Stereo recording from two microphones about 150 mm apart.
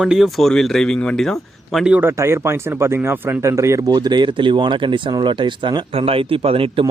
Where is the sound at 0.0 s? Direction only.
5° right (ahead or behind).